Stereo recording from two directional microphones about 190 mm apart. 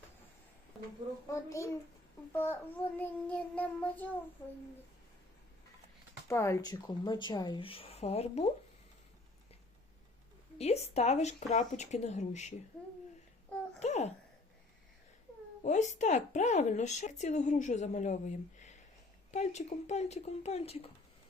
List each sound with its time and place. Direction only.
1.3 s child singing: 15° left (ahead or behind)
6.2 s speech: 15° left (ahead or behind); by 8.4 s 35° left (ahead or behind)
10.6 s speech: 35° left (ahead or behind)
13.7 s babbling: 35° left (ahead or behind)
15.6 s speech: 40° left (ahead or behind)